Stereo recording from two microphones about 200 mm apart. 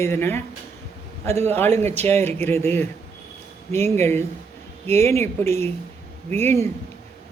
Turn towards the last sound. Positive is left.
turn(degrees=10)  # may be behind; listen again after turning